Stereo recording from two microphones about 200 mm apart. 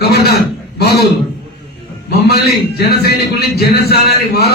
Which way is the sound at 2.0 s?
55° left (ahead or behind).